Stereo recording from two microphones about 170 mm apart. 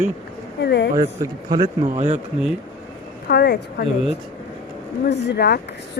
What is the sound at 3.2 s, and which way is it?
Speech, 70° left (ahead or behind).